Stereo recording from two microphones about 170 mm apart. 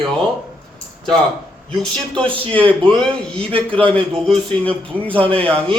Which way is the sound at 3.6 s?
10° left (ahead or behind).